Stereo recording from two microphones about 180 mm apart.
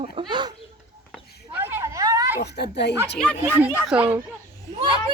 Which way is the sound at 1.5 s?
10° right (ahead or behind).